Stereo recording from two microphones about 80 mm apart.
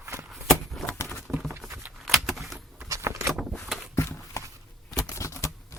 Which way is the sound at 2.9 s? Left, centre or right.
Right.